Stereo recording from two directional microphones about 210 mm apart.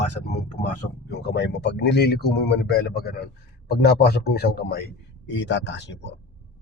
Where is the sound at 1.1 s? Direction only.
50° left (ahead or behind).